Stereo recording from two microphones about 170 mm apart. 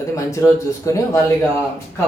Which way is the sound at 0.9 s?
20° left (ahead or behind).